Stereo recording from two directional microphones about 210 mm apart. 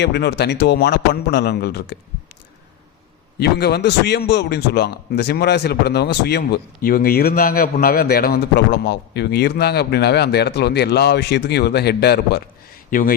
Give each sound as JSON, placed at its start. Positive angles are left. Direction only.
{"t": 0.0, "sound": "a man's voice", "side_deg": 50}
{"t": 3.3, "sound": "a man's voice", "side_deg": 50}
{"t": 12.9, "sound": "a man's voice", "side_deg": 40}